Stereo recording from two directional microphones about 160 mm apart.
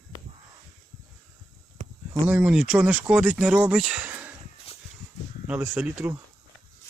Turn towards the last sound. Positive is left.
turn(degrees=-15)  # may be behind; listen again after turning